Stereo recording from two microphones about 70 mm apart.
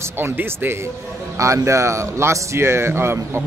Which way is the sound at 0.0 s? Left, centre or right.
Right.